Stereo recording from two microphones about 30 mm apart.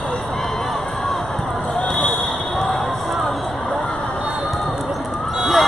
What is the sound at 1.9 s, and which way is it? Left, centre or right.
Basketball bounce, centre.